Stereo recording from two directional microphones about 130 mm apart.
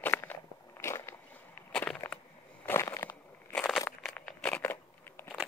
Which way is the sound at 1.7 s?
5° left (ahead or behind).